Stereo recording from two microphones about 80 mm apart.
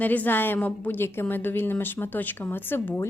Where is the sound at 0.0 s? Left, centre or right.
Left.